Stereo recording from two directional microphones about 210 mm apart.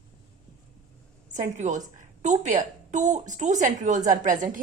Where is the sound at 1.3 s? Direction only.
35° right (ahead or behind).